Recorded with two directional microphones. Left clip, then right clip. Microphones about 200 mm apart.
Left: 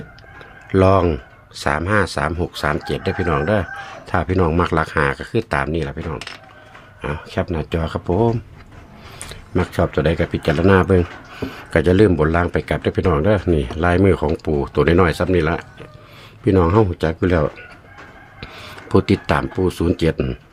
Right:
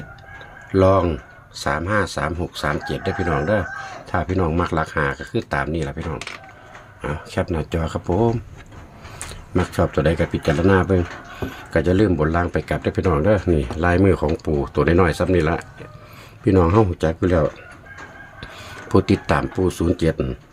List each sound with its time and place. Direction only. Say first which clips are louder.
0.7 s speech: left 1 dB; 20° left (ahead or behind)
18.9 s speech: left 1 dB; 5° left (ahead or behind)